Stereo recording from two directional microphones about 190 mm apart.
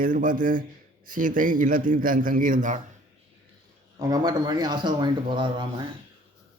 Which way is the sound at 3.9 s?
20° right (ahead or behind).